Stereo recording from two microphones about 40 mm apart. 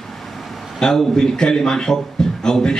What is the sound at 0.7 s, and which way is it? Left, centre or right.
A man's voice, centre.